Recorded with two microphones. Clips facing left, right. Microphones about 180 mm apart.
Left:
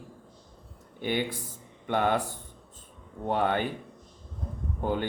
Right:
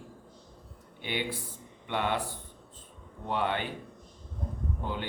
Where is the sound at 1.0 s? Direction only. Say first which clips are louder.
Left 5 dB; 45° left (ahead or behind).